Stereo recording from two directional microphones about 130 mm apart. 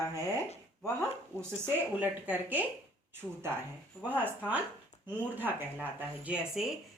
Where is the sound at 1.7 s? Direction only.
15° right (ahead or behind).